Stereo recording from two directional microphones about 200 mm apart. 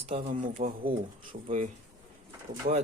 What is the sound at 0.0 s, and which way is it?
Speech, 30° right (ahead or behind).